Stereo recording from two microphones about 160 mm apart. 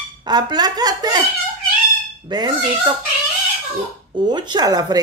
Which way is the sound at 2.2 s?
25° right (ahead or behind).